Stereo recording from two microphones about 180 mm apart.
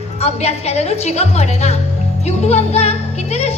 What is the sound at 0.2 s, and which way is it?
A woman's voice, 35° left (ahead or behind).